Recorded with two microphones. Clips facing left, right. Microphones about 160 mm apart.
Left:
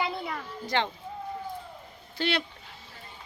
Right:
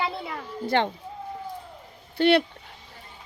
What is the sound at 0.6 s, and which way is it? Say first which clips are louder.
Speech: right 5 dB; 55° right (ahead or behind).